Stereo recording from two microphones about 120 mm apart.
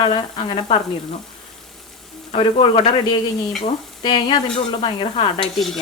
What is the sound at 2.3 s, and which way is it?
Speech, 50° left (ahead or behind).